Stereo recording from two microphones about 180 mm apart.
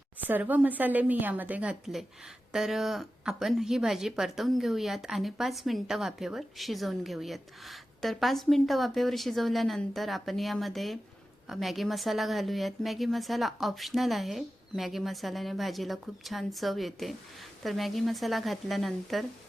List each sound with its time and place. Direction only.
0.3 s a woman's voice: 10° right (ahead or behind)